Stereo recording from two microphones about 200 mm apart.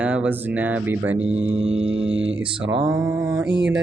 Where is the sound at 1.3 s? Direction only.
70° right (ahead or behind).